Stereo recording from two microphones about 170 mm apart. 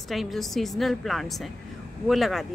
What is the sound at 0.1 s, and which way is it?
Speech, centre (ahead or behind).